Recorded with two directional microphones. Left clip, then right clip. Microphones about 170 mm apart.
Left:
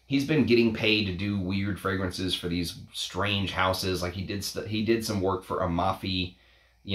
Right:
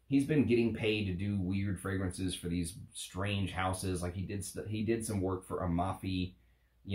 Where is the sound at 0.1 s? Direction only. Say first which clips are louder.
Left 6 dB; 20° left (ahead or behind).